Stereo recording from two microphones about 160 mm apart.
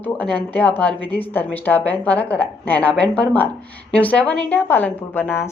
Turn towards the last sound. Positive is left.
turn(degrees=15)  # may be behind; listen again after turning